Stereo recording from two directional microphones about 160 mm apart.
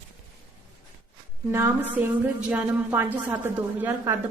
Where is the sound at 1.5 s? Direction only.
15° right (ahead or behind).